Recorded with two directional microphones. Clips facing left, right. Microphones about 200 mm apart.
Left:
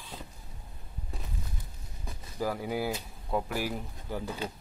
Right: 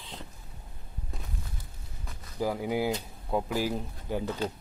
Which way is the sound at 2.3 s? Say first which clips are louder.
Right 3 dB; 15° right (ahead or behind).